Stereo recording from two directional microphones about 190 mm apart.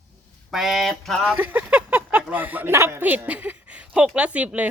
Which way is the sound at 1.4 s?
10° right (ahead or behind).